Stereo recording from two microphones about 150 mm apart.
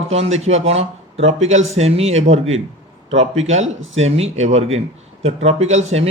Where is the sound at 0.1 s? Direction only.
45° right (ahead or behind).